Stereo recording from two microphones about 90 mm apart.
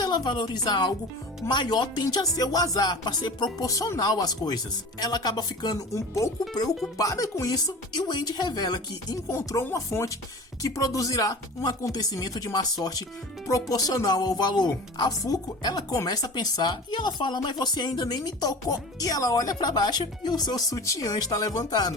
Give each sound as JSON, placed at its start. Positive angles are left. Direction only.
{"t": 0.0, "sound": "speech", "side_deg": 50}
{"t": 3.7, "sound": "speech", "side_deg": 40}
{"t": 5.9, "sound": "speech", "side_deg": 35}
{"t": 6.5, "sound": "speech", "side_deg": 50}
{"t": 9.3, "sound": "speech", "side_deg": 35}